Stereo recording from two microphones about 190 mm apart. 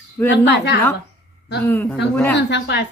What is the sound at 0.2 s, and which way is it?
Speech, 5° left (ahead or behind).